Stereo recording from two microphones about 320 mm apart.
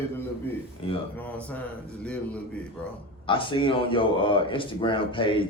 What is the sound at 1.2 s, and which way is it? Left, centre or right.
Speech, centre.